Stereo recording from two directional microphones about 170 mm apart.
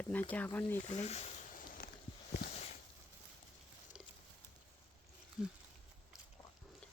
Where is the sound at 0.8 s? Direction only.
40° left (ahead or behind).